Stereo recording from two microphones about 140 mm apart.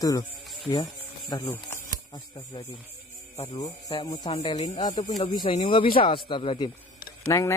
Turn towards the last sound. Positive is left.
turn(degrees=20)  # may be behind; listen again after turning